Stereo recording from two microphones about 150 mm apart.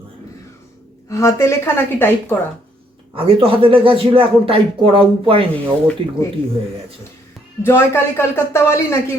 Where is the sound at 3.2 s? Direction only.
40° right (ahead or behind).